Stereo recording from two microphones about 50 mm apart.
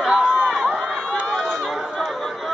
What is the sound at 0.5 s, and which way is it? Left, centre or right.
Run, centre.